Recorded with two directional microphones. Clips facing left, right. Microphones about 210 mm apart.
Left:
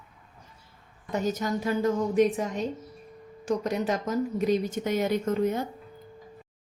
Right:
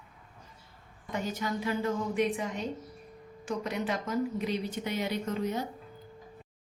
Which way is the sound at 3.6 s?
40° left (ahead or behind).